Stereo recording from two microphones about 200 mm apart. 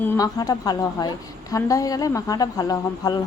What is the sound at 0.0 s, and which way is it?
A woman's voice, 20° left (ahead or behind).